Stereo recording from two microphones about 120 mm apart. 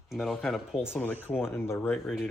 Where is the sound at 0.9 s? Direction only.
15° left (ahead or behind).